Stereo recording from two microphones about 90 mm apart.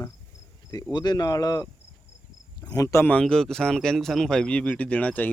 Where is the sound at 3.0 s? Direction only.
15° left (ahead or behind).